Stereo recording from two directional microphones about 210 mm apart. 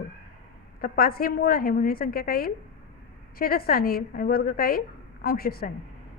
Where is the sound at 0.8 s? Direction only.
45° left (ahead or behind).